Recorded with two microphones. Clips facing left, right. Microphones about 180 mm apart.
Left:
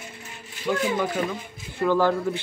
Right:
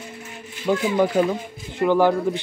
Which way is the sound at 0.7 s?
45° right (ahead or behind).